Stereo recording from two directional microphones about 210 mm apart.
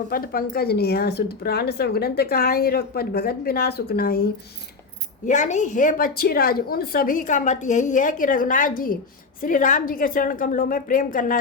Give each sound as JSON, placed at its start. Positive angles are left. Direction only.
{"t": 0.1, "sound": "a woman's voice", "side_deg": 45}